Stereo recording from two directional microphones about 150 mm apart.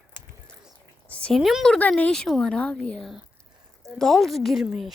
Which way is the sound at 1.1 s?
10° left (ahead or behind).